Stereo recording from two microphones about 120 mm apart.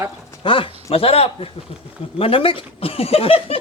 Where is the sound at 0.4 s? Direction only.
45° left (ahead or behind).